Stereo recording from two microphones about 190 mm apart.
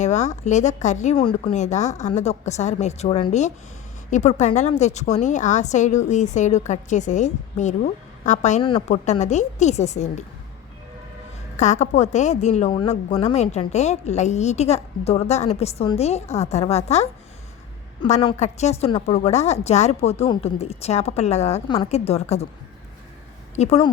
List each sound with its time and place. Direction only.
0.0 s a woman's voice: 35° left (ahead or behind)
11.5 s a woman's voice: 40° left (ahead or behind)
18.1 s a woman's voice: 30° left (ahead or behind)
23.6 s a woman's voice: 30° left (ahead or behind)